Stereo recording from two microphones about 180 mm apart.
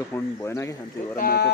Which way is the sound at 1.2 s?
60° left (ahead or behind).